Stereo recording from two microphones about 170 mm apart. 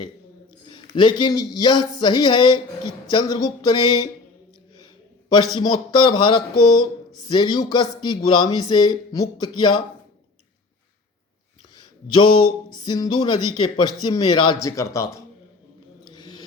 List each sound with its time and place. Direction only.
0.7 s a man's voice: 25° left (ahead or behind)
5.5 s speech: 25° left (ahead or behind)
12.1 s speech: 25° left (ahead or behind)
16.0 s a sound: 25° left (ahead or behind)